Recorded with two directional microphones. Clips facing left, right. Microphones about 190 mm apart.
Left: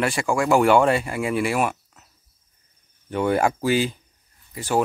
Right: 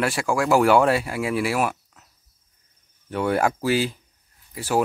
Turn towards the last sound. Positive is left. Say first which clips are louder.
# even
turn(degrees=-5)  # may be behind; listen again after turning